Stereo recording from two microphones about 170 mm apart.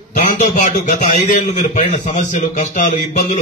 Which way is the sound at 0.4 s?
45° left (ahead or behind).